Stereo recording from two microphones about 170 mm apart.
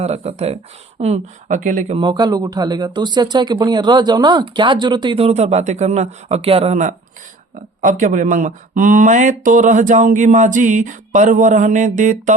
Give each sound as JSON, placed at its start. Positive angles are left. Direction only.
{"t": 0.0, "sound": "speech", "side_deg": -40}
{"t": 2.0, "sound": "speech", "side_deg": -25}